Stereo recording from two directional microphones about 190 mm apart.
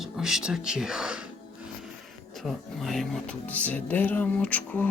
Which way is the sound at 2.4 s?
Centre (ahead or behind).